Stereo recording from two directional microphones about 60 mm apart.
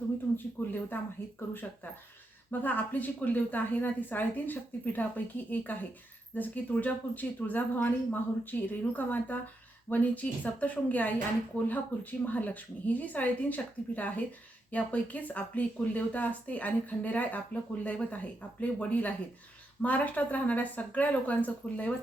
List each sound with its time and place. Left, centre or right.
0.3 s a woman's voice: left
2.5 s a woman's voice: left